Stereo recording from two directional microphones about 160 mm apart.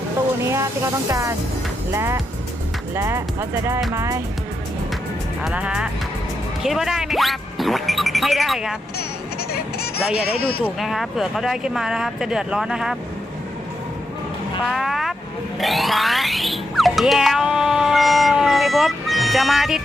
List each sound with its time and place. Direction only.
0.4 s speech: 20° right (ahead or behind)
5.4 s speech: 5° right (ahead or behind)
9.5 s speech: 75° left (ahead or behind)
10.6 s speech: centre (ahead or behind)
14.7 s speech: centre (ahead or behind)
15.6 s music: centre (ahead or behind)